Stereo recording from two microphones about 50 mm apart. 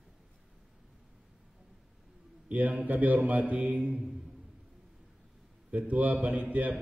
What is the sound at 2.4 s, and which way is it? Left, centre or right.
A man's voice, right.